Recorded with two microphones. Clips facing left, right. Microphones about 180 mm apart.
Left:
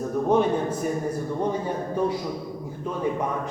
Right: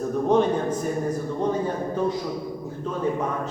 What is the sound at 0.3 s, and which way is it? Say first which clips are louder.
A man's voice: right 1 dB; 10° left (ahead or behind).